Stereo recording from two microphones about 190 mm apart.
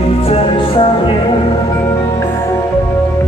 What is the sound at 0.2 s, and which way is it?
Music, 30° left (ahead or behind).